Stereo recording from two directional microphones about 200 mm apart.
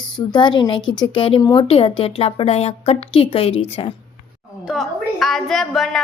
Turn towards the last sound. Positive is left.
turn(degrees=0)  # may be behind; listen again after turning